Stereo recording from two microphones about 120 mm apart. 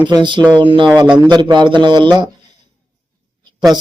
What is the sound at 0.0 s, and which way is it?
Speech, 40° right (ahead or behind).